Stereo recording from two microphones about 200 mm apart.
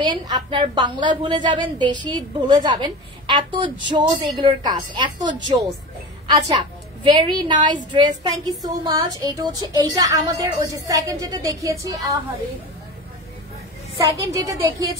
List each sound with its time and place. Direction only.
0.0 s a woman's voice: 25° right (ahead or behind)
13.9 s a woman's voice: 15° right (ahead or behind)